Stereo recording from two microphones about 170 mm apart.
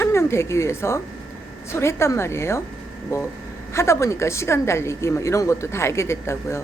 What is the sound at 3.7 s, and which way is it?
Speech, 15° left (ahead or behind).